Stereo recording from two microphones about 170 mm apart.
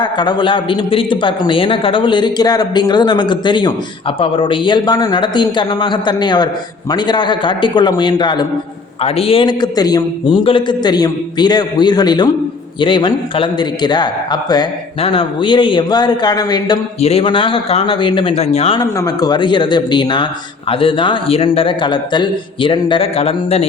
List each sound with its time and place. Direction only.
0.0 s a man's voice: 25° left (ahead or behind)
17.0 s a man's voice: 35° left (ahead or behind)
18.8 s a man's voice: 20° left (ahead or behind)